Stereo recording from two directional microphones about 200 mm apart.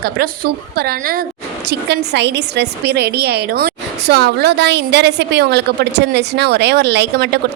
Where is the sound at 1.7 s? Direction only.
60° right (ahead or behind).